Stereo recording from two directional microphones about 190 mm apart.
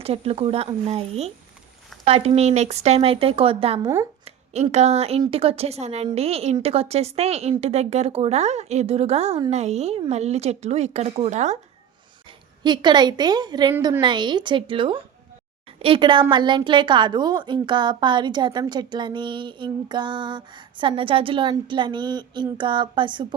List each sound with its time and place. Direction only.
0.0 s a woman's voice: 30° right (ahead or behind)
12.6 s a woman's voice: 25° right (ahead or behind)
13.7 s a woman's voice: 10° right (ahead or behind)
14.0 s a woman's voice: 25° right (ahead or behind)